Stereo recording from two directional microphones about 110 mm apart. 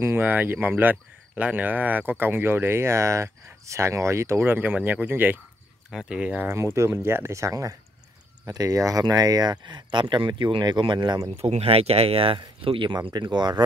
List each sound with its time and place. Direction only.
0.0 s speech: 20° right (ahead or behind)
5.9 s speech: 5° right (ahead or behind); by 11.0 s 45° right (ahead or behind)
11.2 s speech: 65° right (ahead or behind)
12.6 s speech: 50° right (ahead or behind)